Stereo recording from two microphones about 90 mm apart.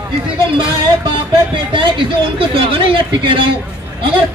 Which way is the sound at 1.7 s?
65° right (ahead or behind).